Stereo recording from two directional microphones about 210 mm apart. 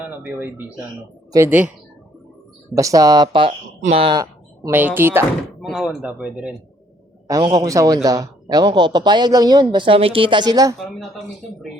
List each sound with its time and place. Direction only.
0.0 s speech: 10° right (ahead or behind)
2.7 s speech: 15° right (ahead or behind)
7.3 s a man's voice: 20° right (ahead or behind)